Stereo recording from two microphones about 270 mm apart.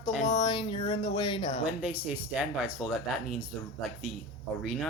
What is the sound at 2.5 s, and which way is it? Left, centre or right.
Speech, centre.